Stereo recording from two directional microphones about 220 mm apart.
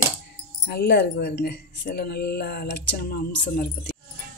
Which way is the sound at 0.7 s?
50° left (ahead or behind).